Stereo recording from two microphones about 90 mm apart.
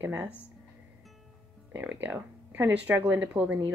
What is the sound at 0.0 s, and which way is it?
Speech, 20° right (ahead or behind).